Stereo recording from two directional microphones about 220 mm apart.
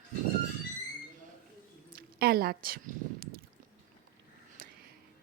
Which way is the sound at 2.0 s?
45° right (ahead or behind).